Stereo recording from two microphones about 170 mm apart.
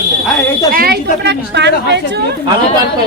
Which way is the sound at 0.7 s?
60° right (ahead or behind).